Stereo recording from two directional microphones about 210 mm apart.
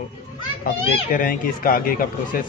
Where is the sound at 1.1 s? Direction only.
40° left (ahead or behind).